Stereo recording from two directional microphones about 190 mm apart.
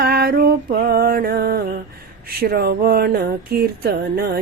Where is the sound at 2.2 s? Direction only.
50° right (ahead or behind).